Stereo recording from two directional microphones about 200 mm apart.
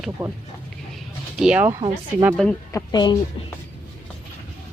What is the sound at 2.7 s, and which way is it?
Speech, 20° left (ahead or behind).